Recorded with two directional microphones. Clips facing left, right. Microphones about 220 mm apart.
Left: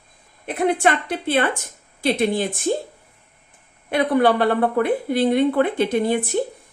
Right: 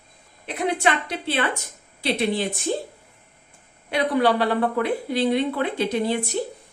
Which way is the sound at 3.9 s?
55° left (ahead or behind).